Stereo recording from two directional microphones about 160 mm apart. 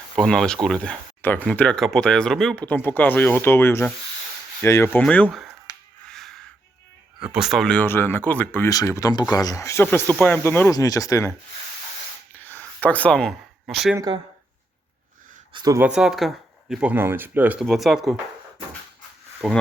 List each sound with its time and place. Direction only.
0.2 s speech: 5° left (ahead or behind)
5.7 s finger snapping: 20° left (ahead or behind)
6.1 s a sound: 5° left (ahead or behind)
7.3 s speech: centre (ahead or behind); by 11.3 s 20° left (ahead or behind)
12.5 s a sound: 10° left (ahead or behind)
13.9 s speech: 25° right (ahead or behind)
15.5 s speech: 20° right (ahead or behind)
15.8 s speech: 5° right (ahead or behind)
19.4 s speech: centre (ahead or behind)